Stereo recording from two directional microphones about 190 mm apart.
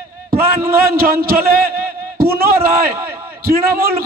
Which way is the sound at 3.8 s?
50° right (ahead or behind).